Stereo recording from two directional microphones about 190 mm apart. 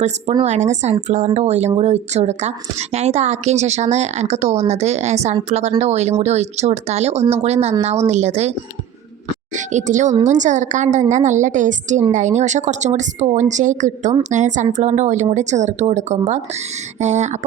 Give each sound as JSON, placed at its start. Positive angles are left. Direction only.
{"t": 0.4, "sound": "speech", "side_deg": -40}
{"t": 9.6, "sound": "speech", "side_deg": -40}